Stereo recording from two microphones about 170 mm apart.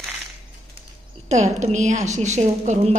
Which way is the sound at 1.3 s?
45° right (ahead or behind).